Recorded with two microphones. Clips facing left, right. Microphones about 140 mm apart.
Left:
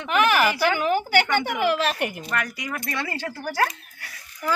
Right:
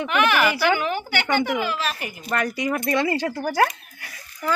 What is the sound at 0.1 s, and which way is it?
Speech, 40° left (ahead or behind).